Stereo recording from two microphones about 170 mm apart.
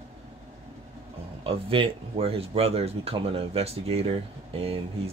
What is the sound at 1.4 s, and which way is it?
Speech, 30° right (ahead or behind).